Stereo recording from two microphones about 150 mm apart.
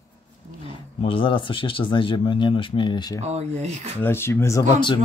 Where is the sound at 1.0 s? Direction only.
35° left (ahead or behind).